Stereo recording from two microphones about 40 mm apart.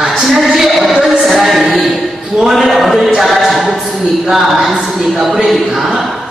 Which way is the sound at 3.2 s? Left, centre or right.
Centre.